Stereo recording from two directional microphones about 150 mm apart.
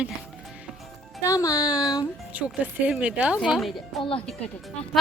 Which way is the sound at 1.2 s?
20° left (ahead or behind).